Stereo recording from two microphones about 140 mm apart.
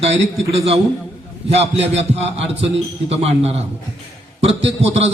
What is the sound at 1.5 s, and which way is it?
A man's voice, 50° right (ahead or behind).